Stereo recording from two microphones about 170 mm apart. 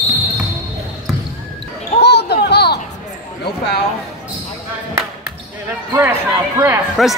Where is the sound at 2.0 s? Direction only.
75° left (ahead or behind).